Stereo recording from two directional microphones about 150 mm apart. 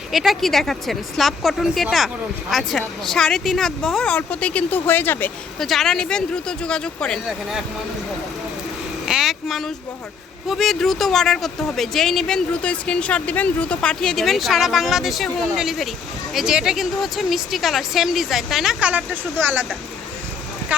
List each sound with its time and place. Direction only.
0.1 s speech: centre (ahead or behind)
5.5 s speech: centre (ahead or behind)
9.0 s vehicle: 5° right (ahead or behind)
10.5 s speech: centre (ahead or behind)